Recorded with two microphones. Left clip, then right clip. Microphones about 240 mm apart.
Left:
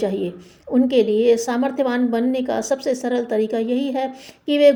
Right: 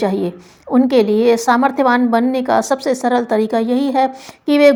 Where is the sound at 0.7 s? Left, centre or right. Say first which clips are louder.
Right 4 dB; right.